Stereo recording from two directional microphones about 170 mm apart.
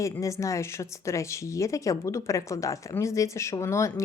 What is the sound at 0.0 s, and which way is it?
Speech, 20° left (ahead or behind).